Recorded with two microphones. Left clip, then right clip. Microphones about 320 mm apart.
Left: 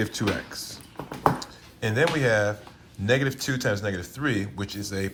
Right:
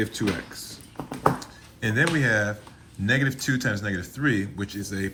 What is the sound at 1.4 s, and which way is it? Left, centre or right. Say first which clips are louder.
Speech: right 1 dB; centre.